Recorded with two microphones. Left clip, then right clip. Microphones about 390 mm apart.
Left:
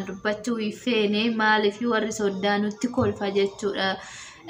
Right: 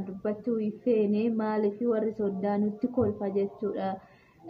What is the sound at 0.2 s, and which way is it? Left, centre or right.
Speech, right.